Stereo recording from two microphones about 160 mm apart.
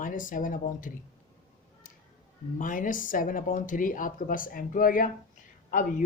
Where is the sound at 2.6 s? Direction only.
55° left (ahead or behind).